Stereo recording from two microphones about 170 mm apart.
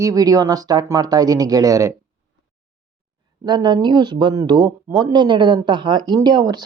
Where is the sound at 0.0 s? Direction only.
20° right (ahead or behind).